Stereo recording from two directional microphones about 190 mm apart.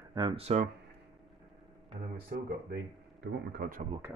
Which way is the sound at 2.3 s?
60° right (ahead or behind).